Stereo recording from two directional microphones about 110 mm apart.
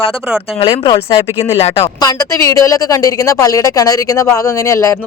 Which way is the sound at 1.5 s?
70° left (ahead or behind).